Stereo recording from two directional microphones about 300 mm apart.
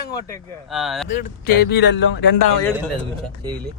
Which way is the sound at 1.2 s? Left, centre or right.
Left.